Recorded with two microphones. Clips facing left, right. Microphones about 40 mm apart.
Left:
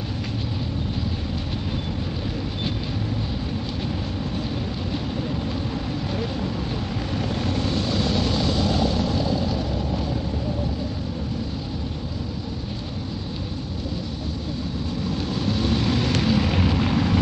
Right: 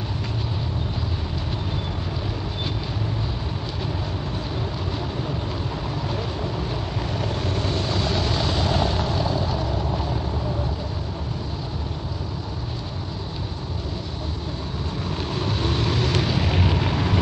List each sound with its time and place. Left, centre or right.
7.2 s wind noise: centre
7.9 s vehicle: right
15.0 s vehicle: right; by 17.2 s centre